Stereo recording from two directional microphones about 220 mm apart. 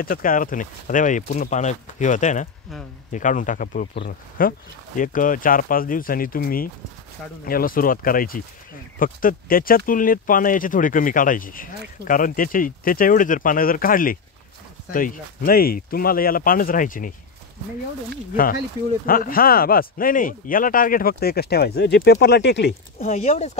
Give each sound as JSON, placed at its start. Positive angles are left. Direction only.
{"t": 0.0, "sound": "speech", "side_deg": 40}
{"t": 18.3, "sound": "speech", "side_deg": 40}
{"t": 22.9, "sound": "speech", "side_deg": 30}